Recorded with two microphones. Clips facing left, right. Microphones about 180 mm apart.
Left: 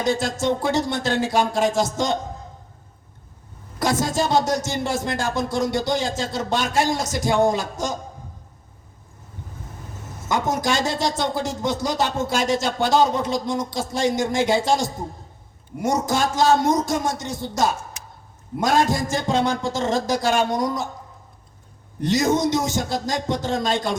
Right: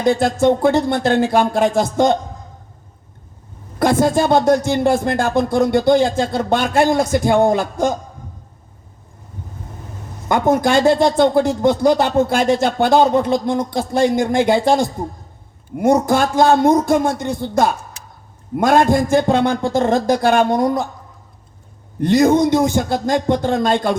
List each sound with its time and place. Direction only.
0.0 s speech: 55° right (ahead or behind)
3.8 s speech: 55° right (ahead or behind)
10.2 s speech: 55° right (ahead or behind)
22.0 s speech: 55° right (ahead or behind)